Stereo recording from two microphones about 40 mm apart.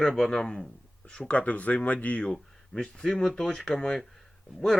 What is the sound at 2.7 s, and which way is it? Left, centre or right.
Speech, centre.